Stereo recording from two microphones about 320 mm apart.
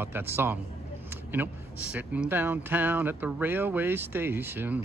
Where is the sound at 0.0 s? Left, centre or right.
Centre.